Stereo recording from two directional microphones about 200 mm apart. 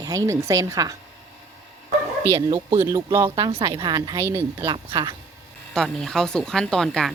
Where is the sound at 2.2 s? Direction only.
15° right (ahead or behind).